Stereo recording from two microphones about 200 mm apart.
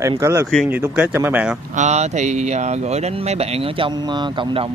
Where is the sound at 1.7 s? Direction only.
35° right (ahead or behind).